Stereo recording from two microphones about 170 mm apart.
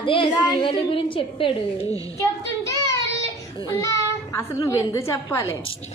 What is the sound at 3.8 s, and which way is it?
A woman's voice, 15° left (ahead or behind).